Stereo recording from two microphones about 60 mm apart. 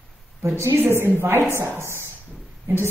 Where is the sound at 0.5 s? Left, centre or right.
Right.